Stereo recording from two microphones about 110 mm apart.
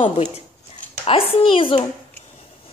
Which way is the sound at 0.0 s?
65° left (ahead or behind).